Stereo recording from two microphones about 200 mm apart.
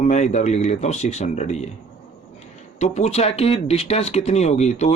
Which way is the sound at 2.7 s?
35° left (ahead or behind).